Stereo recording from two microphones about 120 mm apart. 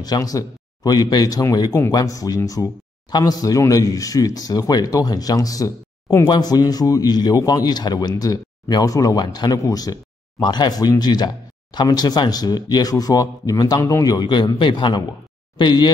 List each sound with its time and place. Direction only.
0.0 s speech: 30° left (ahead or behind)